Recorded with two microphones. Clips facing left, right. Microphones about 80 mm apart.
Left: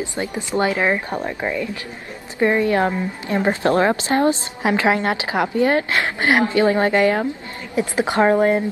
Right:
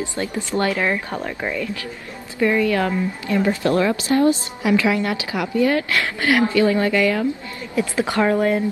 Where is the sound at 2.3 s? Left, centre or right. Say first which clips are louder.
Left 1 dB; left.